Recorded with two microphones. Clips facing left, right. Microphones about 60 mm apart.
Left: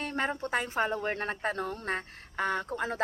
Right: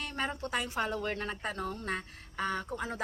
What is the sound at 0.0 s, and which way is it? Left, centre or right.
Speech, left.